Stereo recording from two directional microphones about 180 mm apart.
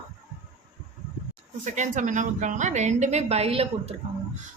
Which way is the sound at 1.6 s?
45° right (ahead or behind).